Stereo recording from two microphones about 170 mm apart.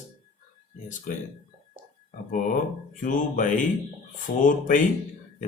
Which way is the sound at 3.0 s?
50° left (ahead or behind).